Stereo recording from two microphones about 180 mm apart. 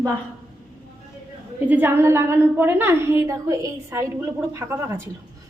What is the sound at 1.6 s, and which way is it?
A woman's voice, 10° right (ahead or behind).